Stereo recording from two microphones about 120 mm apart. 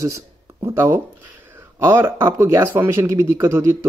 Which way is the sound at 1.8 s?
20° right (ahead or behind).